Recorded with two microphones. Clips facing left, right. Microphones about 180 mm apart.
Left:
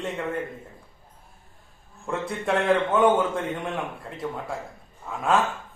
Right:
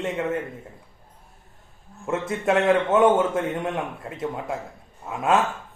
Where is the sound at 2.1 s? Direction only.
20° right (ahead or behind).